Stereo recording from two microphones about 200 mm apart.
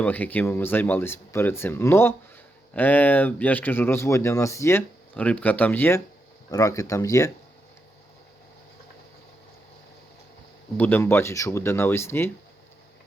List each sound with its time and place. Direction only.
0.0 s speech: 10° left (ahead or behind)
10.8 s speech: 10° left (ahead or behind)